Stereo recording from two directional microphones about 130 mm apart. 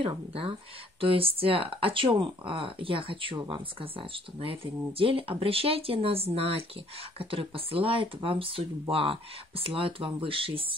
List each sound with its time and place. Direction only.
0.0 s speech: 45° right (ahead or behind)